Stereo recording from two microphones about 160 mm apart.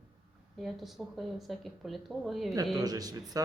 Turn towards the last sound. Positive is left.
turn(degrees=-25)  # may be behind; listen again after turning